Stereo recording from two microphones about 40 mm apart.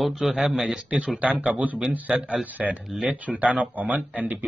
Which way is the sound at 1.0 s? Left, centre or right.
Right.